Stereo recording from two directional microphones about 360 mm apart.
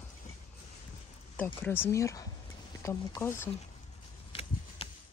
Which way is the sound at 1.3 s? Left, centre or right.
Centre.